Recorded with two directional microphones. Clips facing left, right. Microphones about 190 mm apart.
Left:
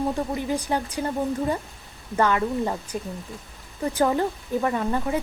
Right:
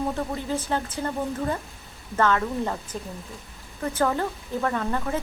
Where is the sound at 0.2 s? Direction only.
15° left (ahead or behind).